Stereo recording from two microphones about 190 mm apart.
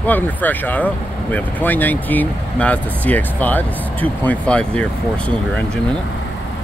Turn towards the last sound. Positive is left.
turn(degrees=5)  # may be behind; listen again after turning